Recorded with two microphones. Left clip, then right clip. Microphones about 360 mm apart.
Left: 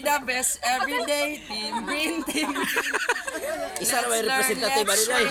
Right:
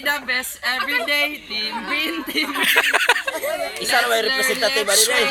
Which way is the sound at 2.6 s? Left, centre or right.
Centre.